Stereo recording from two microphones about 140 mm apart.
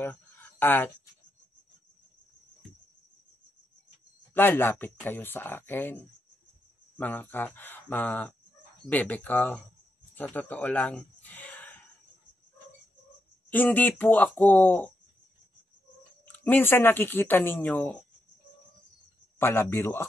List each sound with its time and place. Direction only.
0.0 s a sound: 15° left (ahead or behind)
4.3 s speech: 15° left (ahead or behind)
13.5 s speech: 15° left (ahead or behind)
16.3 s speech: 15° left (ahead or behind)
19.3 s speech: 15° left (ahead or behind)